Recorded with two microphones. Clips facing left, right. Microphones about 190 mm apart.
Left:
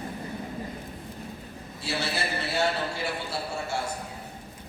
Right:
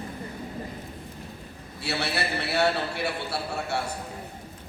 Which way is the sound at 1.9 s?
65° right (ahead or behind).